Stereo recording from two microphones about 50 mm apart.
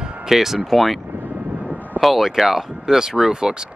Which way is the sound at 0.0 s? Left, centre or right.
Centre.